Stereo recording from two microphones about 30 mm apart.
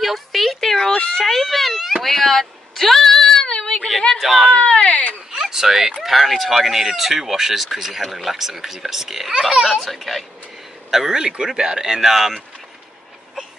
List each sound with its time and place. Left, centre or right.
0.0 s a sound: centre
0.6 s cat: centre
1.2 s cat: centre
2.0 s a sound: centre
3.4 s child singing: left
4.2 s a child's voice: centre
4.5 s a sound: left
5.3 s a sound: centre
6.0 s a child's voice: centre
9.8 s a child's voice: centre
10.9 s speech: centre
11.1 s speech: right; by 12.4 s centre